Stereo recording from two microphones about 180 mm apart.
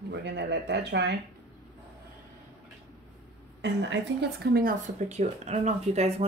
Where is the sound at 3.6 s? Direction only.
70° right (ahead or behind).